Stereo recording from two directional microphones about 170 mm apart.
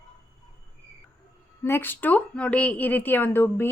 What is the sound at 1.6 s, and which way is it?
A woman's voice, 10° left (ahead or behind).